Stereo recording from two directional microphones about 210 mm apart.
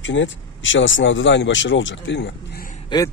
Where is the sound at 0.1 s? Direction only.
60° left (ahead or behind).